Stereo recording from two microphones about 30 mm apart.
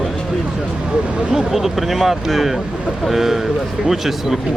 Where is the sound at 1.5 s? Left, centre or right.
Centre.